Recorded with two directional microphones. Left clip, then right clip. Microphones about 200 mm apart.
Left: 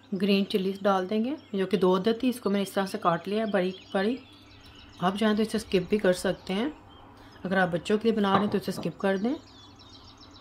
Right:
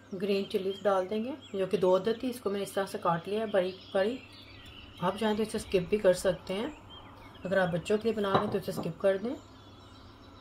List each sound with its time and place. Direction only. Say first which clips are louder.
0.2 s speech: left 4 dB; 55° left (ahead or behind)